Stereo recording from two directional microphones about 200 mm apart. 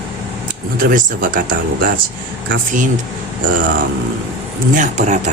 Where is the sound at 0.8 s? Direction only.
45° right (ahead or behind).